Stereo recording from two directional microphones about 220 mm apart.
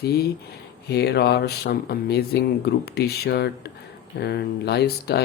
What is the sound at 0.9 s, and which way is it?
Speech, 50° left (ahead or behind).